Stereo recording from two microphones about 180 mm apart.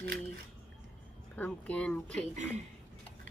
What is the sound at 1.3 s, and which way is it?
Speech, 10° left (ahead or behind).